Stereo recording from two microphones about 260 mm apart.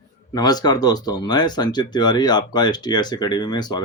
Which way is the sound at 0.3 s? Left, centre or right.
Centre.